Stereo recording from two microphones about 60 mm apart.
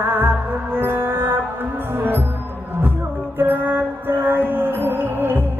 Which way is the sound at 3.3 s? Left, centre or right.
Right.